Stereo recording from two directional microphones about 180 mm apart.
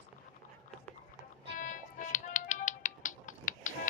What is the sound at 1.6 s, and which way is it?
Music, 45° left (ahead or behind).